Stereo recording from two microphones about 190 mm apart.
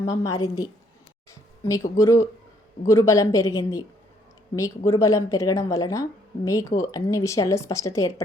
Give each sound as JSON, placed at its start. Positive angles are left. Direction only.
{"t": 0.0, "sound": "a woman's voice", "side_deg": 20}
{"t": 4.9, "sound": "a woman's voice", "side_deg": 15}